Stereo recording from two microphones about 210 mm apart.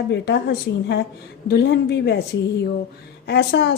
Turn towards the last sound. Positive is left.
turn(degrees=50)  # may be behind; listen again after turning